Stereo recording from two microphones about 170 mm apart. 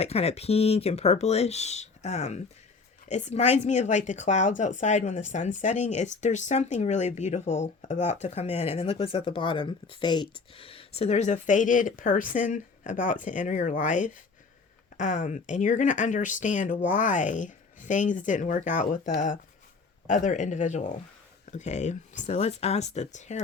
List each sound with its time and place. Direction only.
0.0 s speech: 35° left (ahead or behind)